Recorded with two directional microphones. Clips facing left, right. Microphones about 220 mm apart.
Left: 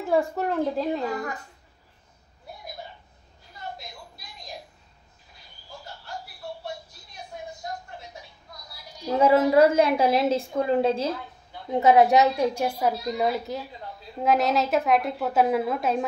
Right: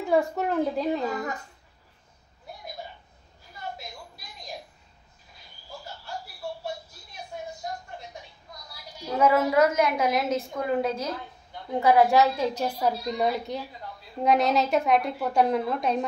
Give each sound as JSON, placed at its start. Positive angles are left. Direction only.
{"t": 0.0, "sound": "a woman's voice", "side_deg": 0}
{"t": 9.2, "sound": "a woman's voice", "side_deg": 30}